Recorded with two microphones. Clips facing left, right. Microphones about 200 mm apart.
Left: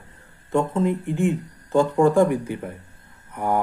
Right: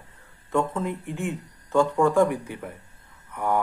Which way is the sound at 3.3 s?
35° left (ahead or behind).